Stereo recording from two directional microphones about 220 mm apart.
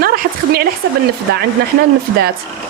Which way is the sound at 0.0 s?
45° right (ahead or behind).